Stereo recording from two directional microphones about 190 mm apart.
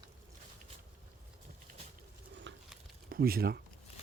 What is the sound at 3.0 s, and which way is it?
Speech, 50° right (ahead or behind).